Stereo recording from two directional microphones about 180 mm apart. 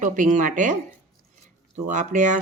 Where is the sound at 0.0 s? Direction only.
45° right (ahead or behind).